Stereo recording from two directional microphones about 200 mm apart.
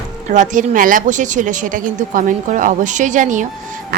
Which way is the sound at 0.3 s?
40° right (ahead or behind).